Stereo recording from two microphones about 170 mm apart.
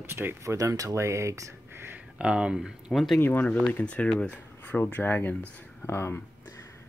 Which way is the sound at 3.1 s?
10° left (ahead or behind).